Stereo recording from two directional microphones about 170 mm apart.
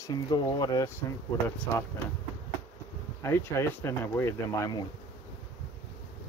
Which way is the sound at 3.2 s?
15° left (ahead or behind).